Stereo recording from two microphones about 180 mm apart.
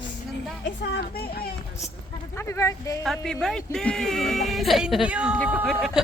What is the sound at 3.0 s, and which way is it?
Speech, centre (ahead or behind).